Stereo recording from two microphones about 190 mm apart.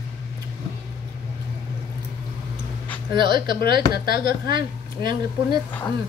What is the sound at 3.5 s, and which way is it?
Speech, 55° left (ahead or behind).